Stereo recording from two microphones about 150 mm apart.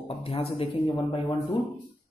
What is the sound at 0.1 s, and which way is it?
Speech, 40° left (ahead or behind).